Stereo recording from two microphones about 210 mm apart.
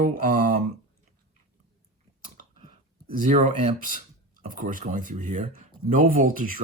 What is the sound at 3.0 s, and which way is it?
Speech, 40° right (ahead or behind).